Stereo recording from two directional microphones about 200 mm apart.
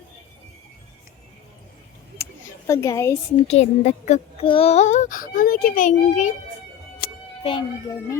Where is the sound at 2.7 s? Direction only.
15° left (ahead or behind).